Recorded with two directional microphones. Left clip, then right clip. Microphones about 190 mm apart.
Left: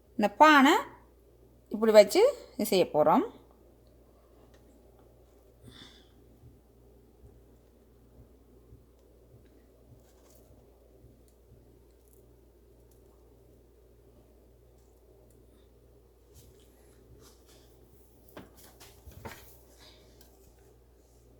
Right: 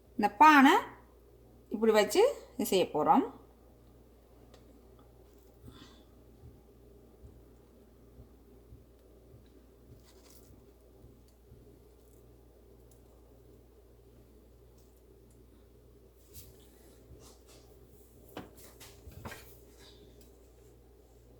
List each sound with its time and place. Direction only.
0.2 s a woman's voice: 40° left (ahead or behind)
1.8 s a woman's voice: 35° left (ahead or behind)